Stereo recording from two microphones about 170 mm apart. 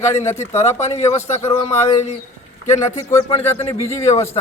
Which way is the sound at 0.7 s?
40° left (ahead or behind).